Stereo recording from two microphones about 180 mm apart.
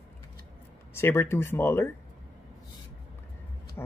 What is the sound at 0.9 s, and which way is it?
Speech, 15° left (ahead or behind).